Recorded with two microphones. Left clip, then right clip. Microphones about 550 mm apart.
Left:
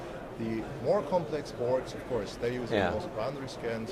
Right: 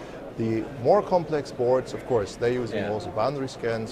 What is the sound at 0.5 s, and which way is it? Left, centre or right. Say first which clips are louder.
Speech: right 8 dB; right.